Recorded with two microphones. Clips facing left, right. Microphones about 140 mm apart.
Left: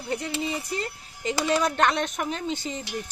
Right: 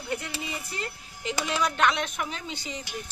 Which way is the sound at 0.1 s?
35° left (ahead or behind).